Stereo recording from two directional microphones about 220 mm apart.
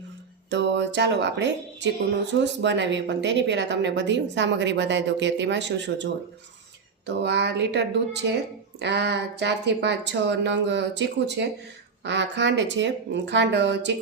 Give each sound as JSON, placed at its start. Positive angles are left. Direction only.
{"t": 0.5, "sound": "speech", "side_deg": -55}